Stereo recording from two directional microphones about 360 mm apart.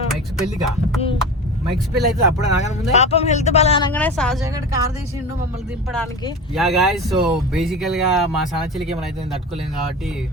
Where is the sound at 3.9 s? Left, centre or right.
Centre.